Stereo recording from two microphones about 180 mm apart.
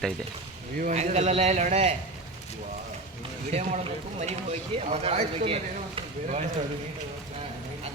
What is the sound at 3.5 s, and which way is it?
Speech, 35° right (ahead or behind).